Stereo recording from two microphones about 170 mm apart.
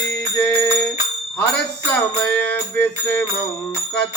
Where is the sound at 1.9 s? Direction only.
10° left (ahead or behind).